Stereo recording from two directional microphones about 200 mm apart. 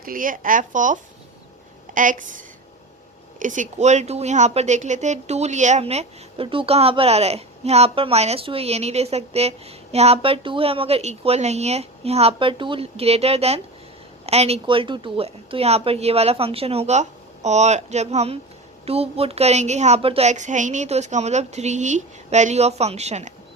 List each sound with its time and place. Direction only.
0.0 s speech: 45° right (ahead or behind)
2.0 s a woman's voice: 40° right (ahead or behind)